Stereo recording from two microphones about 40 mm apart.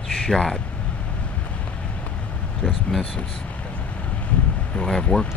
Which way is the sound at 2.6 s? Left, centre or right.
Left.